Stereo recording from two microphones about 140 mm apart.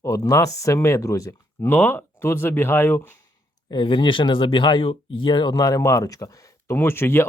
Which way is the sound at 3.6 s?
35° left (ahead or behind).